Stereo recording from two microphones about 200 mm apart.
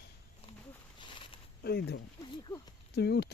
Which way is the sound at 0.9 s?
25° left (ahead or behind).